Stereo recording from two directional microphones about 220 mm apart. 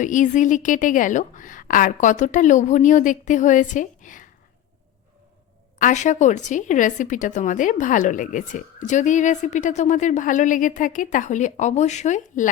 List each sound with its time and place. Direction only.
0.0 s speech: 35° left (ahead or behind)
5.8 s speech: 35° left (ahead or behind)